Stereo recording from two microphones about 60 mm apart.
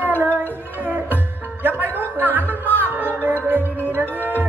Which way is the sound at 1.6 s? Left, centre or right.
Right.